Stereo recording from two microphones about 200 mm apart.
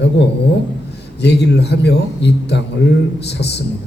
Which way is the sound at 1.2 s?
55° left (ahead or behind).